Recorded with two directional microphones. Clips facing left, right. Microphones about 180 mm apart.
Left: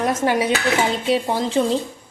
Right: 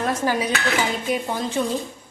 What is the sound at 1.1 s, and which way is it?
Speech, 30° left (ahead or behind).